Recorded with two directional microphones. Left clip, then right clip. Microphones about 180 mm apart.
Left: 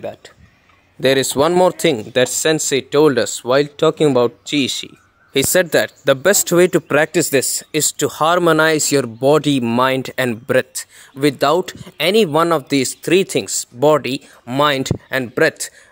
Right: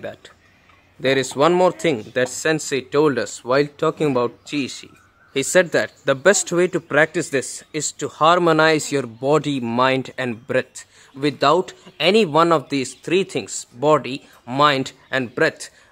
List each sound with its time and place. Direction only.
0.0 s speech: 15° left (ahead or behind)
1.0 s speech: 40° left (ahead or behind)